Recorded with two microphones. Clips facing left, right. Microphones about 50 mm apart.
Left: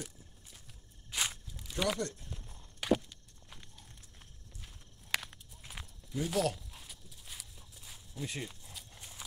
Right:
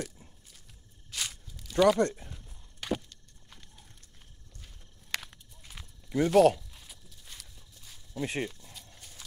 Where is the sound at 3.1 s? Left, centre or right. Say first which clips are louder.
Even; centre.